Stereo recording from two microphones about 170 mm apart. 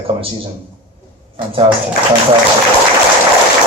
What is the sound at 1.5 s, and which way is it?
Speech, 30° right (ahead or behind).